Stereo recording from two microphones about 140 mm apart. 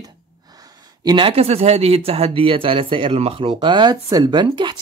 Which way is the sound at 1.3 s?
45° right (ahead or behind).